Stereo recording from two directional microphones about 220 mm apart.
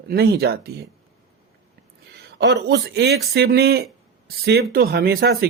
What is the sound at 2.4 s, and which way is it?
Speech, 50° right (ahead or behind).